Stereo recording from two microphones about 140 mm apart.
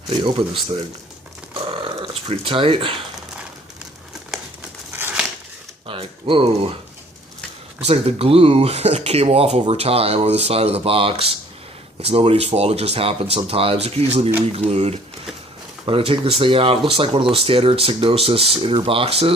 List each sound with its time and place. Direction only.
0.1 s speech: 35° right (ahead or behind)
1.6 s speech: 40° right (ahead or behind)
4.9 s a sound: 15° right (ahead or behind)
5.9 s speech: 40° right (ahead or behind)
7.8 s speech: 50° right (ahead or behind)